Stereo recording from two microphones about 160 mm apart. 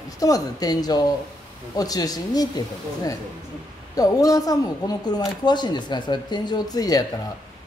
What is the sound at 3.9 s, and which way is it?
Speech, 20° left (ahead or behind).